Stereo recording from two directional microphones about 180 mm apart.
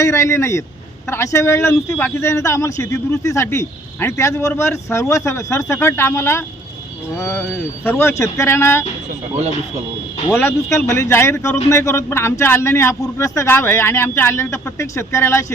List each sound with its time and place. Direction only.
0.0 s speech: 15° left (ahead or behind)
10.3 s speech: 10° left (ahead or behind)